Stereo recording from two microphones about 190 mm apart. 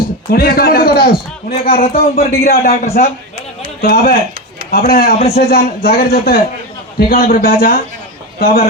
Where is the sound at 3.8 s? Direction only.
50° left (ahead or behind).